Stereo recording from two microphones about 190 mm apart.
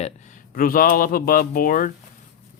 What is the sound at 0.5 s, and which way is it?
Speech, 50° left (ahead or behind).